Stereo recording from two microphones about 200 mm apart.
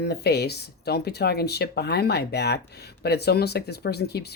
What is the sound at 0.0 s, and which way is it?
Speech, 55° left (ahead or behind).